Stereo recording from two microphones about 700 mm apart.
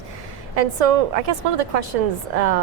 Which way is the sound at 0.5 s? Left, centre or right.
Right.